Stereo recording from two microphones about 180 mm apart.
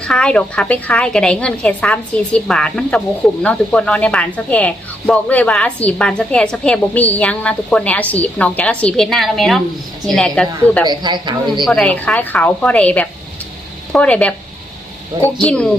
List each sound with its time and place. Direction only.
0.0 s a woman's voice: 5° left (ahead or behind)
10.8 s a man's voice: 25° right (ahead or behind)
11.6 s speech: 5° left (ahead or behind)
15.4 s speech: 5° left (ahead or behind)